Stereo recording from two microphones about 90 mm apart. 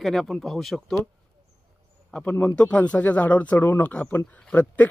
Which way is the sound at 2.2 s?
15° left (ahead or behind).